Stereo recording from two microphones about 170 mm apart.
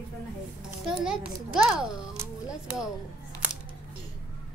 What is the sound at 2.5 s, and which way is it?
Speech, 5° right (ahead or behind).